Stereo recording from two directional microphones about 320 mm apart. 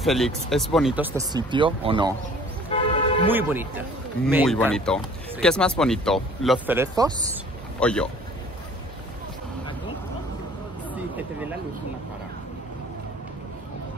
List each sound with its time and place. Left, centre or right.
0.0 s speech: centre
2.7 s toot: centre
3.3 s speech: centre
7.8 s speech: centre